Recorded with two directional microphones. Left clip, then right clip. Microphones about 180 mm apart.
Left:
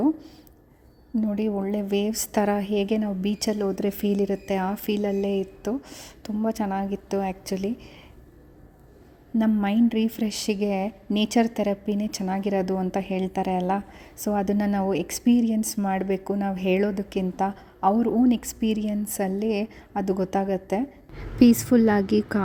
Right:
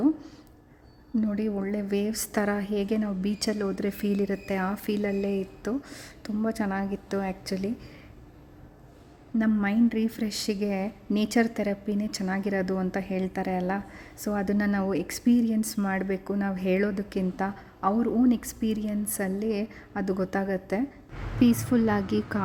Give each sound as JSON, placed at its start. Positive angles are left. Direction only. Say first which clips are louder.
{"t": 1.1, "sound": "a woman's voice", "louder": "left 3 dB", "side_deg": 10}
{"t": 9.4, "sound": "a woman's voice", "louder": "left 2 dB", "side_deg": 20}